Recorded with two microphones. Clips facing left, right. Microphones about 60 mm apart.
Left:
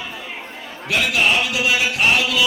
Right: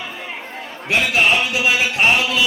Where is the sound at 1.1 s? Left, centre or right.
Right.